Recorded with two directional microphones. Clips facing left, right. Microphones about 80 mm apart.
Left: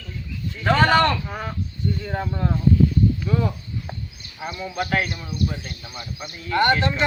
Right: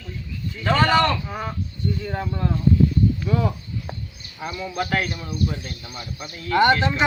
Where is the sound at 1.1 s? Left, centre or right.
Centre.